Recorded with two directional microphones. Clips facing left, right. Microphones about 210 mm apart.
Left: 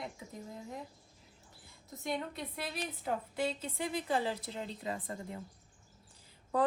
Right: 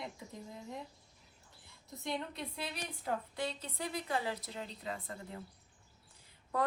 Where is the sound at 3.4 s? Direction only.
25° left (ahead or behind).